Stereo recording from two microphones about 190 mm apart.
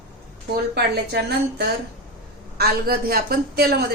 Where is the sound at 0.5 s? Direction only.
55° right (ahead or behind).